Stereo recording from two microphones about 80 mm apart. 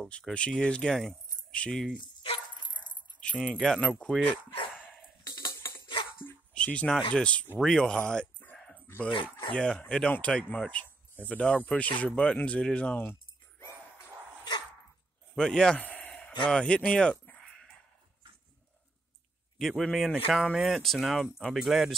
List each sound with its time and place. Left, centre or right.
0.3 s speech: centre
2.7 s dog: centre
3.5 s speech: centre
5.5 s music: left
6.5 s speech: centre
8.7 s dog: left
9.5 s speech: centre
12.9 s a sound: left
15.3 s speech: centre
15.8 s a sound: centre
19.6 s speech: centre